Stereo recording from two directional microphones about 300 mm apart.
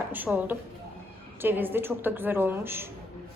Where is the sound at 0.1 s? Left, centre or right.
Centre.